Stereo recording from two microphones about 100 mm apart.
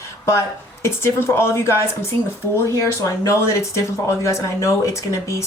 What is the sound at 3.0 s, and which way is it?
Speech, 30° left (ahead or behind).